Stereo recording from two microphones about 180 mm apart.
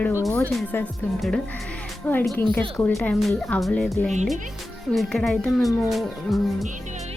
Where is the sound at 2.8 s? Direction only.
10° left (ahead or behind).